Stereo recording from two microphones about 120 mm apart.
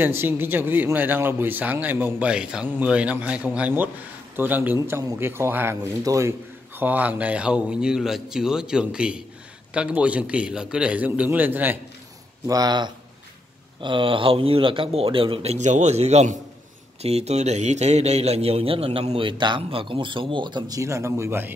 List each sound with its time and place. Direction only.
0.0 s speech: 20° right (ahead or behind)
6.8 s speech: 15° right (ahead or behind)
12.4 s speech: 35° right (ahead or behind); by 15.5 s 50° right (ahead or behind)
15.5 s a man's voice: 75° right (ahead or behind); by 21.5 s 20° right (ahead or behind)